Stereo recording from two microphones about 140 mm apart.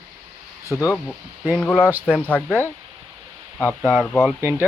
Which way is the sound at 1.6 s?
10° left (ahead or behind).